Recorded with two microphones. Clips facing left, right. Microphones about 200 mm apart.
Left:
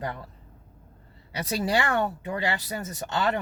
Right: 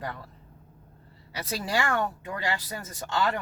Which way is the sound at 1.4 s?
20° left (ahead or behind).